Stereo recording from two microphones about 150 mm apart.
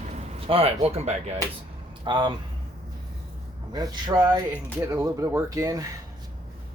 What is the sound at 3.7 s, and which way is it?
Speech, 25° right (ahead or behind).